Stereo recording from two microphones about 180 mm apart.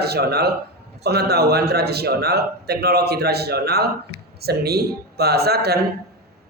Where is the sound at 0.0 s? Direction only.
60° right (ahead or behind).